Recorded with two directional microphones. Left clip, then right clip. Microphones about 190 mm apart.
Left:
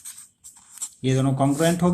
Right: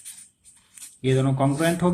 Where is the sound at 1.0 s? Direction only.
20° left (ahead or behind).